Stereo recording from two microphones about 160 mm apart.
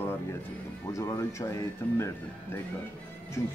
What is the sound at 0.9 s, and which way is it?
Speech, 20° left (ahead or behind).